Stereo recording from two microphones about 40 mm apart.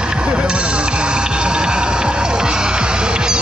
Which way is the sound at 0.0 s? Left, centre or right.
Right.